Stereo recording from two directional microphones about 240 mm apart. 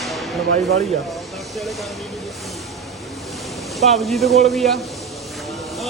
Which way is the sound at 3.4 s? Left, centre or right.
Centre.